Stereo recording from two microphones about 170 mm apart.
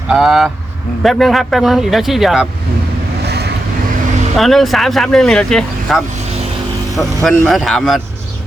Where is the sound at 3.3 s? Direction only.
70° right (ahead or behind).